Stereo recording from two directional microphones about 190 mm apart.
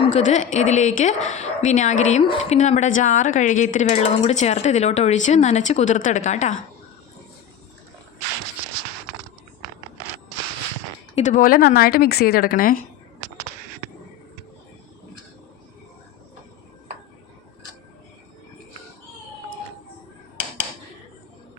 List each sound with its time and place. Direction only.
0.0 s a woman's voice: 40° left (ahead or behind)
11.1 s speech: 40° left (ahead or behind)